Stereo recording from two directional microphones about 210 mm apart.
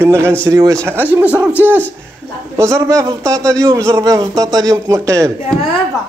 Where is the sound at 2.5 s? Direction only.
15° right (ahead or behind).